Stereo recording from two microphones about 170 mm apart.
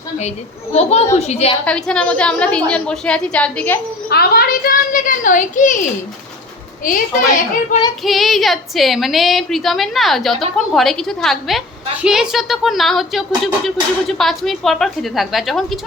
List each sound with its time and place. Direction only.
0.2 s a child's voice: 40° left (ahead or behind)
1.6 s a woman's voice: 5° left (ahead or behind)
4.1 s a sound: 65° left (ahead or behind); by 5.8 s 50° left (ahead or behind)
6.8 s a woman's voice: 55° left (ahead or behind)
8.0 s speech: centre (ahead or behind)